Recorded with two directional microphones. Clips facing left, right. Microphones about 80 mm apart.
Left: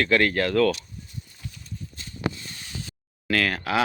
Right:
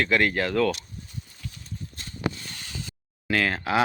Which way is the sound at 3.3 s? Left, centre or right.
Right.